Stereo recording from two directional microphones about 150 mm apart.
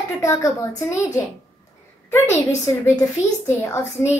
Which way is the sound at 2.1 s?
15° left (ahead or behind).